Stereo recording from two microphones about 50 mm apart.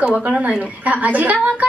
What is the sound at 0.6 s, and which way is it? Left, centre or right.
Speech, right.